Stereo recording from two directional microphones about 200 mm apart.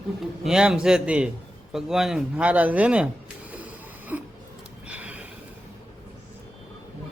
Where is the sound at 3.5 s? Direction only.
10° right (ahead or behind).